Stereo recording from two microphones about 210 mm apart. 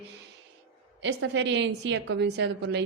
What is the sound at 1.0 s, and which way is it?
A woman's voice, 60° right (ahead or behind).